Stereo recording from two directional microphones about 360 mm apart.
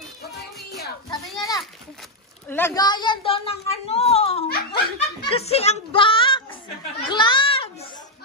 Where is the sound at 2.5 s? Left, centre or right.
Centre; by 4.8 s left.